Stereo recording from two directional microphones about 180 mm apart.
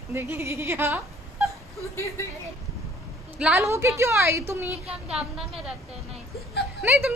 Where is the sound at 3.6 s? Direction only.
15° right (ahead or behind).